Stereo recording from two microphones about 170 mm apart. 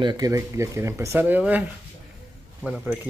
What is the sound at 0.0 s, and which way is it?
Speech, 25° right (ahead or behind).